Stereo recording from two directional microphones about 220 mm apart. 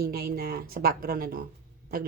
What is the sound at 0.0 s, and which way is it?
Speech, 45° right (ahead or behind).